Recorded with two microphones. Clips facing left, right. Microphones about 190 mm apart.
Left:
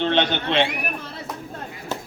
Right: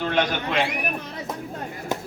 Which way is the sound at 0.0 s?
25° left (ahead or behind).